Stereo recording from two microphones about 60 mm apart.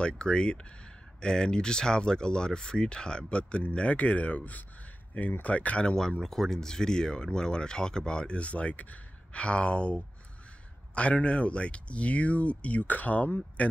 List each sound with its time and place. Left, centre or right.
0.0 s speech: centre